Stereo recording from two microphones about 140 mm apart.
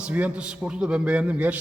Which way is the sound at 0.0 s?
10° right (ahead or behind).